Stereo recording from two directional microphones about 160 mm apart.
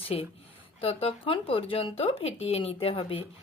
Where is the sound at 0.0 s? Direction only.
40° left (ahead or behind).